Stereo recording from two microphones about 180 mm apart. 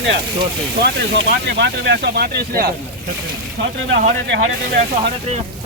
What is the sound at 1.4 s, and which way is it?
Speech, 70° right (ahead or behind).